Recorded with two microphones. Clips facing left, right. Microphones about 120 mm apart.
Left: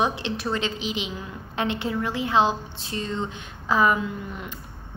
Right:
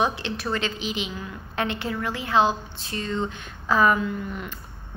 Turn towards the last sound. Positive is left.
turn(degrees=15)  # may be behind; listen again after turning